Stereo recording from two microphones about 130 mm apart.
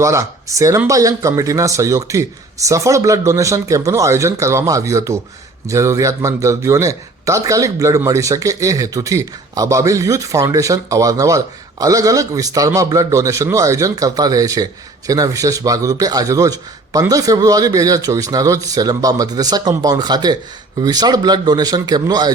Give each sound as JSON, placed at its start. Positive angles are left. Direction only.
{"t": 0.0, "sound": "a man's voice", "side_deg": -25}